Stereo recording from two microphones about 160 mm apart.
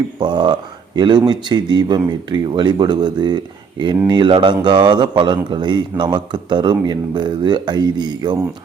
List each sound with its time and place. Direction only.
0.2 s speech: 30° right (ahead or behind)